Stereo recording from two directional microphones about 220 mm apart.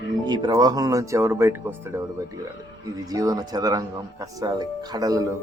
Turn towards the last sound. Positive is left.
turn(degrees=-15)  # may be behind; listen again after turning